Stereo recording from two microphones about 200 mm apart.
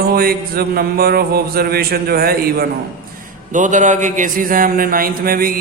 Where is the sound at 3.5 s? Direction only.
40° right (ahead or behind).